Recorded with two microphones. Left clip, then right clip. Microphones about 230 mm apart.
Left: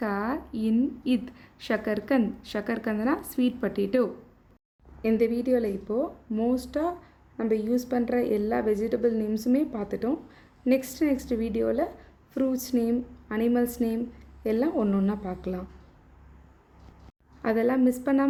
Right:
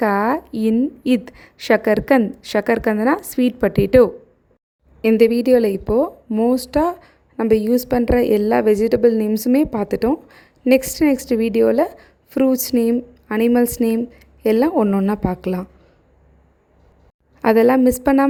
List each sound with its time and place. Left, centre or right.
0.0 s a woman's voice: right
17.4 s a woman's voice: right